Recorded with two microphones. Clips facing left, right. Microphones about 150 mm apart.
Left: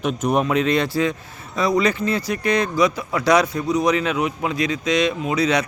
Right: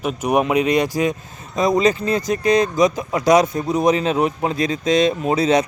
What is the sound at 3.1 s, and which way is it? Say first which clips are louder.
Speech: right 3 dB; 20° right (ahead or behind).